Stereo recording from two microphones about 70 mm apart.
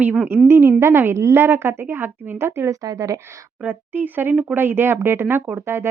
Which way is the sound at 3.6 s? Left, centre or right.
Right.